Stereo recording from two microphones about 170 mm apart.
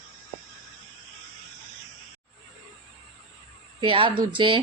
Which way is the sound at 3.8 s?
30° right (ahead or behind).